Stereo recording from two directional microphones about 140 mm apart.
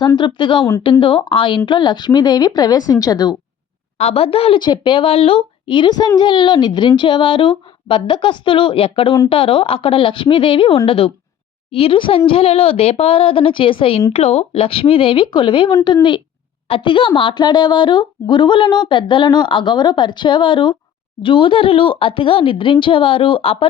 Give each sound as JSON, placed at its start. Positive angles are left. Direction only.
{"t": 0.2, "sound": "speech", "side_deg": 35}
{"t": 3.9, "sound": "a woman's voice", "side_deg": 50}